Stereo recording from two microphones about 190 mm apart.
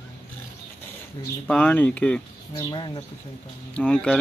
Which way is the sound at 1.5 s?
5° left (ahead or behind).